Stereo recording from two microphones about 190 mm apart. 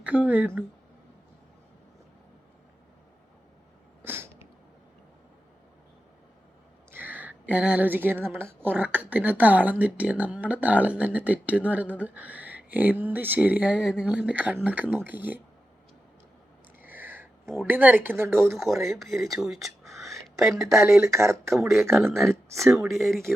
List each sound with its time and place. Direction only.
0.0 s speech: 10° right (ahead or behind)
4.0 s a sound: 10° right (ahead or behind)
6.9 s a woman's voice: 10° right (ahead or behind)
16.8 s a sound: 10° right (ahead or behind)
17.4 s speech: centre (ahead or behind)
17.7 s a woman's voice: 10° right (ahead or behind)
18.5 s speech: centre (ahead or behind)
20.2 s a sound: centre (ahead or behind)
20.7 s a woman's voice: 15° right (ahead or behind)
22.2 s speech: centre (ahead or behind)